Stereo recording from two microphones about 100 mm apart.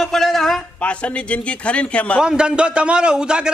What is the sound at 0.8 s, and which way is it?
A man's voice, 10° left (ahead or behind).